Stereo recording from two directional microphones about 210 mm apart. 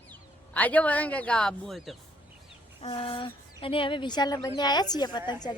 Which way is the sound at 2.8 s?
25° left (ahead or behind).